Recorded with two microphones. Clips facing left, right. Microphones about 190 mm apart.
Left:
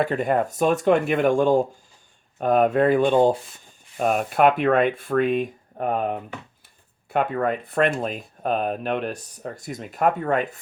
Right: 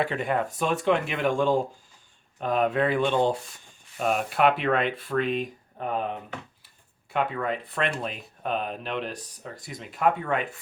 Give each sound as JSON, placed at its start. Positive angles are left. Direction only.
{"t": 0.0, "sound": "speech", "side_deg": 45}